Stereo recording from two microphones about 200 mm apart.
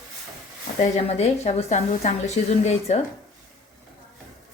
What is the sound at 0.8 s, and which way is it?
A woman's voice, 35° left (ahead or behind).